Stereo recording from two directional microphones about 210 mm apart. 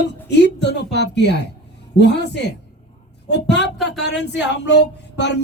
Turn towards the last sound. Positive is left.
turn(degrees=55)  # may be behind; listen again after turning